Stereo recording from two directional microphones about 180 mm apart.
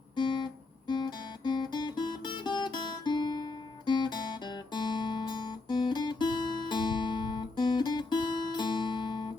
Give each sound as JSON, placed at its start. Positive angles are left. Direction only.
{"t": 0.2, "sound": "guitar", "side_deg": 25}
{"t": 0.9, "sound": "music", "side_deg": 25}